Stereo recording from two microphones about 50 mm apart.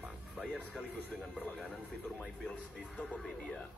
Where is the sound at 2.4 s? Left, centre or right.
Left.